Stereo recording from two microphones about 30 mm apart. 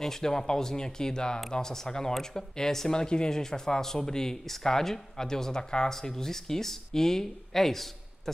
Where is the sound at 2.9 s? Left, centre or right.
Left.